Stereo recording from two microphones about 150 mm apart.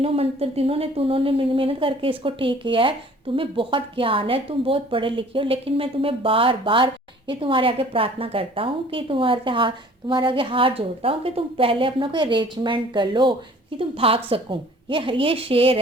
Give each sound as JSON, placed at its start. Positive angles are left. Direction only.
{"t": 0.0, "sound": "speech", "side_deg": -40}